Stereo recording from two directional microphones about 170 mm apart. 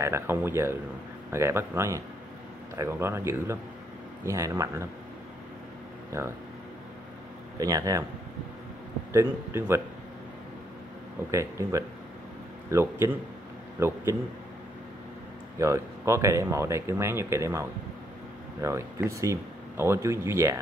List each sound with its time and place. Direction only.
0.0 s speech: 15° right (ahead or behind)
6.1 s speech: 15° right (ahead or behind)
7.5 s speech: 20° right (ahead or behind)
9.1 s speech: 15° right (ahead or behind)
11.3 s speech: 15° right (ahead or behind)
15.6 s speech: 15° right (ahead or behind)